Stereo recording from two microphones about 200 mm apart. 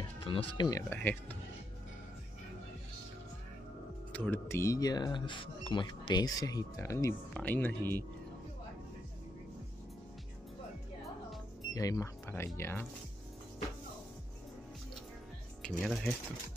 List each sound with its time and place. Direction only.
0.2 s speech: 25° left (ahead or behind); by 1.4 s 10° left (ahead or behind)
4.1 s speech: 10° left (ahead or behind)
11.7 s speech: 15° left (ahead or behind)
15.8 s speech: centre (ahead or behind)